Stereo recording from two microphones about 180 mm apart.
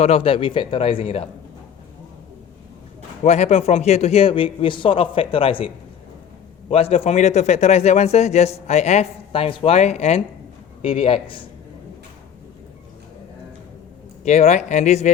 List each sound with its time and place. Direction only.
0.0 s a man's voice: 35° left (ahead or behind)
3.2 s a man's voice: 40° left (ahead or behind)
14.3 s a man's voice: 40° left (ahead or behind)